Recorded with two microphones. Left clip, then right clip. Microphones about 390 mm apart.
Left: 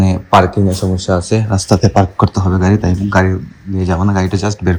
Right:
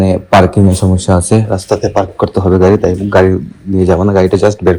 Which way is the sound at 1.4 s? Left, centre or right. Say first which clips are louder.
Right 2 dB; centre.